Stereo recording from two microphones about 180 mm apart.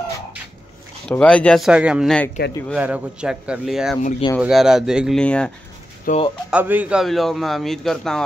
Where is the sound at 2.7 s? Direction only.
10° right (ahead or behind).